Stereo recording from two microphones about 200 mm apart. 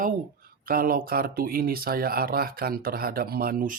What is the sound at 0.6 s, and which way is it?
Speech, 45° right (ahead or behind).